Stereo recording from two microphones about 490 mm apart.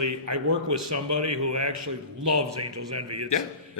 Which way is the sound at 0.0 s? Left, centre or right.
Right.